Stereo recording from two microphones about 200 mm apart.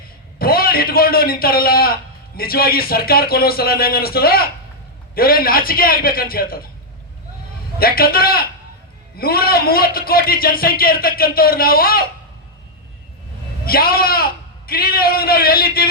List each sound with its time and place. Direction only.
0.3 s a man's voice: 50° left (ahead or behind)
7.8 s a man's voice: 50° left (ahead or behind)
13.7 s a man's voice: 50° left (ahead or behind)